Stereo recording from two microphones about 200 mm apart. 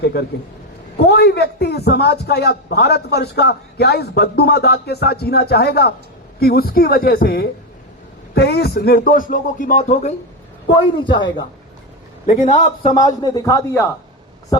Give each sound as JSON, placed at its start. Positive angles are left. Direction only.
{"t": 0.0, "sound": "a sound", "side_deg": 55}
{"t": 0.9, "sound": "a man's voice", "side_deg": 55}
{"t": 11.0, "sound": "speech", "side_deg": 25}
{"t": 12.2, "sound": "a man's voice", "side_deg": 35}
{"t": 12.9, "sound": "a man's voice", "side_deg": 20}